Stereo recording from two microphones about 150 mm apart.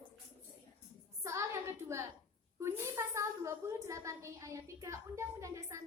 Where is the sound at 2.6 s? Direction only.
15° right (ahead or behind).